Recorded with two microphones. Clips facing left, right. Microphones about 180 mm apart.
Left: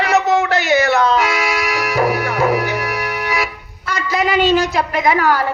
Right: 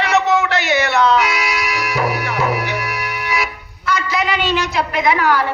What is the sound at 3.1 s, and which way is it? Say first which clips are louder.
Music: left 2 dB; 45° left (ahead or behind).